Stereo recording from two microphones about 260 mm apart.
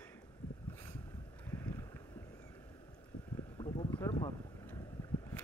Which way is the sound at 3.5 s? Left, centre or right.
Left.